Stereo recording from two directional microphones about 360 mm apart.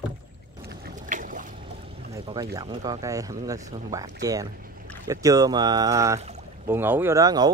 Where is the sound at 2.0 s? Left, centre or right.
Centre.